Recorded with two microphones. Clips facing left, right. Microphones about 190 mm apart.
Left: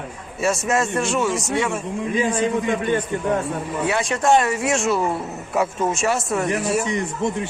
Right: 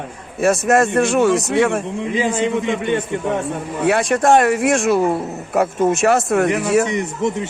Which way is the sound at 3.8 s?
55° right (ahead or behind).